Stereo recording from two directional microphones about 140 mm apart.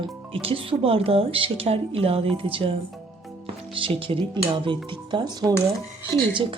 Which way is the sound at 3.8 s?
40° right (ahead or behind).